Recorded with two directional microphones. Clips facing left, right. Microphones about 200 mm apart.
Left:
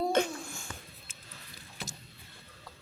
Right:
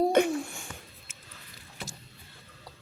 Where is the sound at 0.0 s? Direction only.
15° right (ahead or behind).